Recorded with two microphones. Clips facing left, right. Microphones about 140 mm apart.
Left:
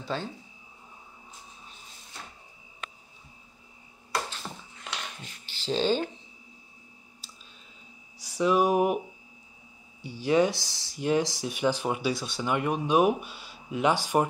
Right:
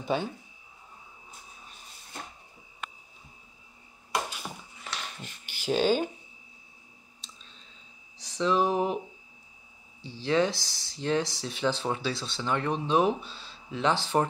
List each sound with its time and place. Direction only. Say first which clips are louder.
0.0 s speech: right 4 dB; 15° right (ahead or behind)
4.1 s a sound: right 1 dB; 10° right (ahead or behind)
7.2 s clicking: right 1 dB; 5° left (ahead or behind)
8.2 s speech: left 2 dB; 10° left (ahead or behind)
10.0 s speech: left 2 dB; 15° left (ahead or behind)